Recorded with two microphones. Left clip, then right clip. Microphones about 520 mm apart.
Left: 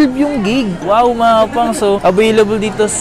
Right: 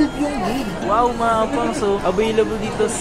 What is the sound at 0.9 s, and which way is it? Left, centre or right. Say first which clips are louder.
Speech: left 7 dB; left.